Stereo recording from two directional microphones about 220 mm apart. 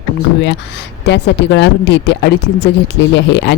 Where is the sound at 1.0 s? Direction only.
50° left (ahead or behind).